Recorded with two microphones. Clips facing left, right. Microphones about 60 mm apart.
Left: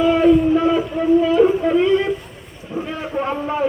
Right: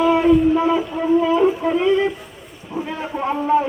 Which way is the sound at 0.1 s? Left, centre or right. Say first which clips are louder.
Left 2 dB; centre.